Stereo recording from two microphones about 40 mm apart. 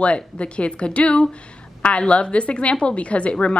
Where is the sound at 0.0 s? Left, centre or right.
Left.